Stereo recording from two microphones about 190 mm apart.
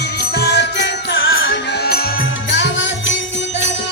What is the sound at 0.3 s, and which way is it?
Music, 60° left (ahead or behind).